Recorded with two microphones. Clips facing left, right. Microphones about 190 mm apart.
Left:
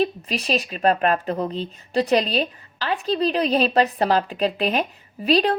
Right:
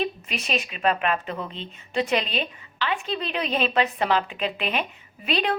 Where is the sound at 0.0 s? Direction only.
35° left (ahead or behind).